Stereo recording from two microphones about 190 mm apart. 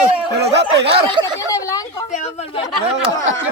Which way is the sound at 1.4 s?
15° left (ahead or behind).